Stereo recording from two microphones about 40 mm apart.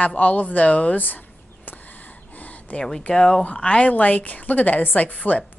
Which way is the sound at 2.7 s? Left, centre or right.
Left.